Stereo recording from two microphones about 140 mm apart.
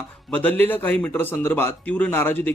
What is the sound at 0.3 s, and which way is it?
Speech, 10° left (ahead or behind).